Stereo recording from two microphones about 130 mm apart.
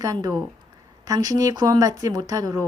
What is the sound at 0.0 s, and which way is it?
Speech, 30° right (ahead or behind).